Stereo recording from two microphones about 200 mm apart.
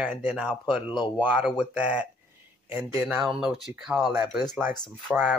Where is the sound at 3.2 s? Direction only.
Centre (ahead or behind).